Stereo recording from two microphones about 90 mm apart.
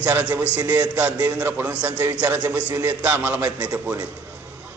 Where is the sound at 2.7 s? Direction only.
25° right (ahead or behind).